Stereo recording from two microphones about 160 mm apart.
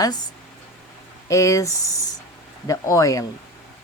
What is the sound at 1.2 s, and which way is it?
Speech, 20° left (ahead or behind).